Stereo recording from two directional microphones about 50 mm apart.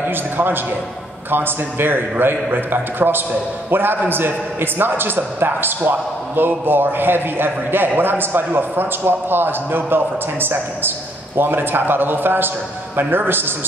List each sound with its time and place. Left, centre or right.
0.0 s a man's voice: right